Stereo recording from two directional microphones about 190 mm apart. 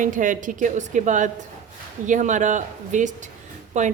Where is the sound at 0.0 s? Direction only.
45° right (ahead or behind).